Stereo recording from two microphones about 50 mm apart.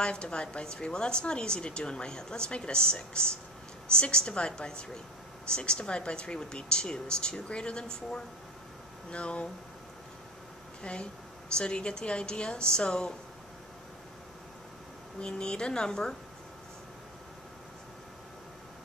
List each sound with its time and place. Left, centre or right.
0.0 s a woman's voice: centre
10.8 s a woman's voice: centre
15.1 s a woman's voice: centre